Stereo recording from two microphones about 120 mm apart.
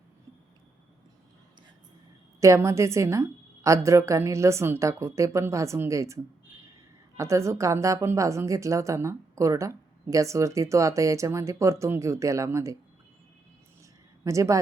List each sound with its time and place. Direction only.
2.4 s speech: 25° right (ahead or behind)
14.3 s speech: 25° right (ahead or behind)